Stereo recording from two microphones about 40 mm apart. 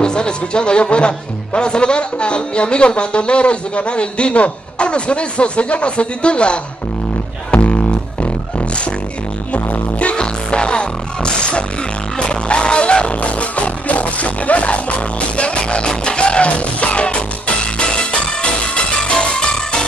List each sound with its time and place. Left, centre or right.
0.0 s speech: left
7.5 s music: left